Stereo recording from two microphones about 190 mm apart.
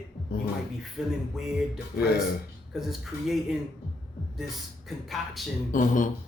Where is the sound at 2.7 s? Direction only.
Centre (ahead or behind).